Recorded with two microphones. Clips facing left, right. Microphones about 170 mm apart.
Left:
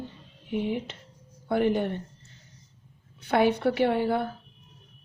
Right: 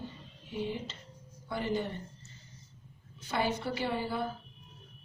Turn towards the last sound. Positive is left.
turn(degrees=65)  # may be behind; listen again after turning